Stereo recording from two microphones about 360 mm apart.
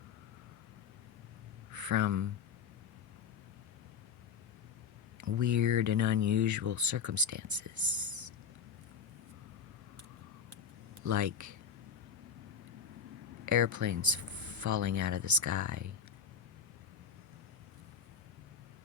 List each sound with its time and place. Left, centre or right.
1.7 s speech: right
5.2 s speech: right
11.0 s speech: right
13.4 s speech: right